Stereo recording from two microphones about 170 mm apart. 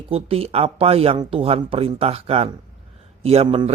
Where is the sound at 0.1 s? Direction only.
35° right (ahead or behind).